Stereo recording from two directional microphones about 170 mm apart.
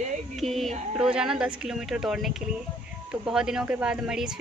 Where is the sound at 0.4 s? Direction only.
Centre (ahead or behind).